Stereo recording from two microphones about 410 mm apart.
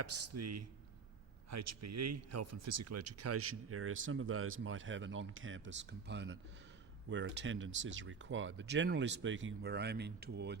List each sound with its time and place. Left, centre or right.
0.0 s speech: right